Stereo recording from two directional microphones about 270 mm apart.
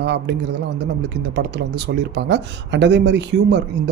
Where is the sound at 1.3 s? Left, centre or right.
Right.